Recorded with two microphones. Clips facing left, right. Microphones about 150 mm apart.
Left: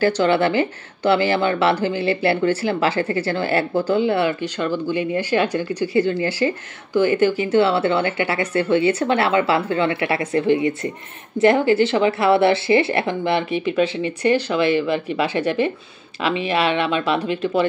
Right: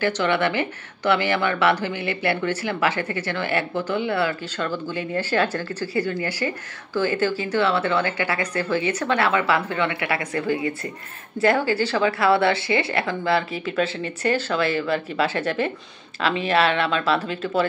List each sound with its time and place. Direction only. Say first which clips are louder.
0.0 s speech: left 5 dB; 30° left (ahead or behind); by 17.6 s 15° left (ahead or behind)